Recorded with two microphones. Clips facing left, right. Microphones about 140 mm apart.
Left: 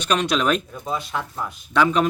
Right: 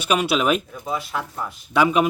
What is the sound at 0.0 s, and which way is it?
Speech, 10° right (ahead or behind).